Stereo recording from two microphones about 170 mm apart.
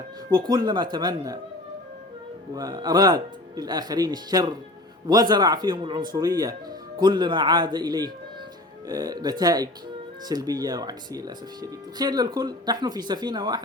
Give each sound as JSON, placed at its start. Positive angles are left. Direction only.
{"t": 0.3, "sound": "speech", "side_deg": -25}
{"t": 2.6, "sound": "speech", "side_deg": -25}